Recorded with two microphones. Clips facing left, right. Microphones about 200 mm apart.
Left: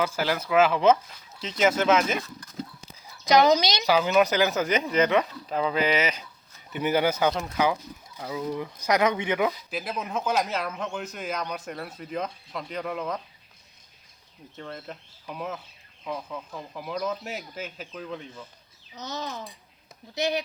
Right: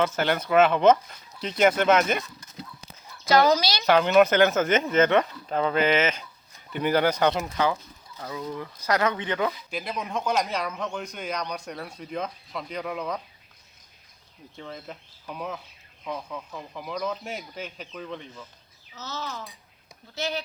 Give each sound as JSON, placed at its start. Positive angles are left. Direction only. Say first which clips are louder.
{"t": 0.0, "sound": "speech", "louder": "right 2 dB", "side_deg": 5}
{"t": 3.2, "sound": "a woman's voice", "louder": "left 1 dB", "side_deg": 20}
{"t": 3.8, "sound": "speech", "louder": "right 4 dB", "side_deg": 0}
{"t": 7.6, "sound": "speech", "louder": "left 2 dB", "side_deg": 10}
{"t": 14.5, "sound": "speech", "louder": "left 1 dB", "side_deg": 0}
{"t": 18.9, "sound": "a child's voice", "louder": "left 1 dB", "side_deg": 15}